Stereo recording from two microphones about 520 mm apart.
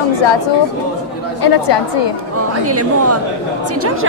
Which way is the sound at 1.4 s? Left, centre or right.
Left.